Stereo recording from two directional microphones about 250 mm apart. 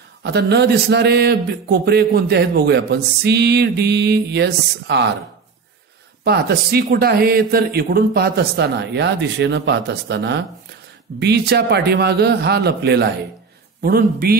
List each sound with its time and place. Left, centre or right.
0.2 s speech: right
6.2 s speech: right